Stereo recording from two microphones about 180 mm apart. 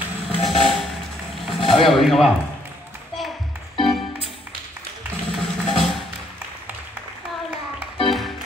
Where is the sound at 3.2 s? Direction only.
Centre (ahead or behind).